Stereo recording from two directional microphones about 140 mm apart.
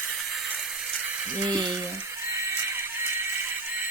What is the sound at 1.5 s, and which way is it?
Speech, 30° right (ahead or behind).